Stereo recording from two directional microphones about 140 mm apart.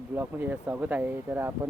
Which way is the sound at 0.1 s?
15° right (ahead or behind).